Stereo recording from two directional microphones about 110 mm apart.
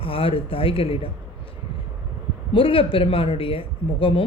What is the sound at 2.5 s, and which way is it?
Speech, 55° left (ahead or behind).